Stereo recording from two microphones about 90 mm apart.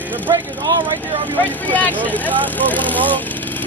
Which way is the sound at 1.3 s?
20° left (ahead or behind).